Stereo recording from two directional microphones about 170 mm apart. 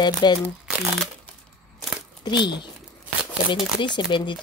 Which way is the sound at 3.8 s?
25° left (ahead or behind).